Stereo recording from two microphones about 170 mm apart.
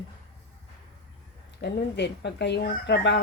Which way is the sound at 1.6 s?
85° left.